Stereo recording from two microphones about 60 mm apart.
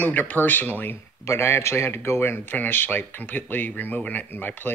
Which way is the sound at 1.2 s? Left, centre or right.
Left.